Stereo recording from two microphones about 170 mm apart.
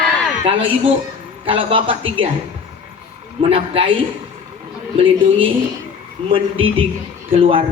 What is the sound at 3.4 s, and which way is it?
Speech, 35° right (ahead or behind).